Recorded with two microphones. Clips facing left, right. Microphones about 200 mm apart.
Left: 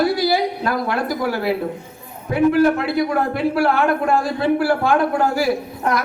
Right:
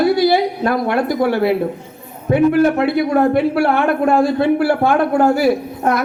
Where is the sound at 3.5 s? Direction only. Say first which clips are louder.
Right 2 dB; 25° right (ahead or behind).